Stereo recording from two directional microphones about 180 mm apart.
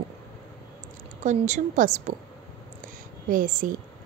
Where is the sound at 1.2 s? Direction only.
45° right (ahead or behind).